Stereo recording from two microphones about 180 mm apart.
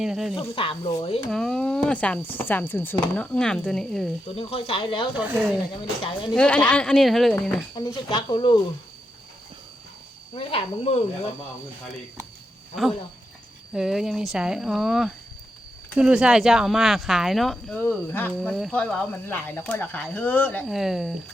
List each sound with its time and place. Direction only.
0.0 s speech: centre (ahead or behind)
0.3 s speech: 30° left (ahead or behind)
1.3 s speech: 5° left (ahead or behind)
4.4 s speech: 30° left (ahead or behind)
5.1 s speech: 10° right (ahead or behind)
6.3 s speech: 5° left (ahead or behind)
7.8 s speech: 20° left (ahead or behind)
10.3 s speech: 30° left (ahead or behind)
13.7 s speech: centre (ahead or behind)
18.3 s speech: centre (ahead or behind)
20.7 s speech: centre (ahead or behind)